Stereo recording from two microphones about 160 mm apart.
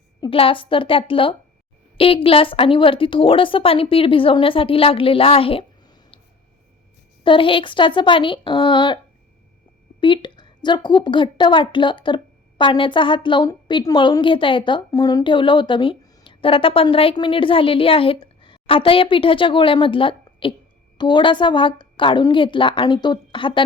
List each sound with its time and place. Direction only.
0.2 s a woman's voice: 35° left (ahead or behind)
7.3 s a woman's voice: 35° left (ahead or behind)
10.0 s a woman's voice: 30° left (ahead or behind)